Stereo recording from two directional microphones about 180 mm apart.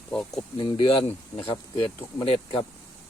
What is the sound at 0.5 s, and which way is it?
Speech, 25° left (ahead or behind).